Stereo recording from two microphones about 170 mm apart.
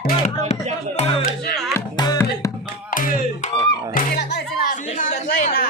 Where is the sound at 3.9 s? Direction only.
55° left (ahead or behind).